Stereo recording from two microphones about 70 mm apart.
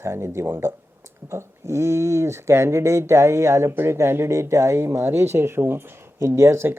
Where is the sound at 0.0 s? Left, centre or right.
Right.